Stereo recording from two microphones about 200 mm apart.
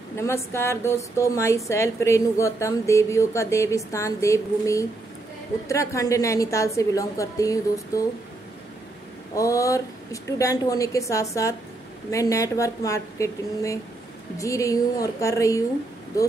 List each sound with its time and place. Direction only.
0.1 s a woman's voice: 15° left (ahead or behind)
9.3 s a woman's voice: 15° left (ahead or behind)